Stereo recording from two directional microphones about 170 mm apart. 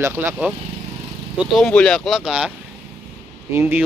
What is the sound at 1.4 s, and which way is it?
Speech, centre (ahead or behind).